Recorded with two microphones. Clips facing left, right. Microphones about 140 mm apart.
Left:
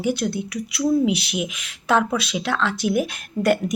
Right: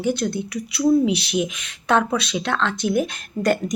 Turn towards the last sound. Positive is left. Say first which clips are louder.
# left 1 dB
turn(degrees=5)  # may be behind; listen again after turning